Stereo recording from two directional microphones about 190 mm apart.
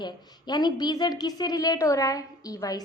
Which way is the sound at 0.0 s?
20° left (ahead or behind).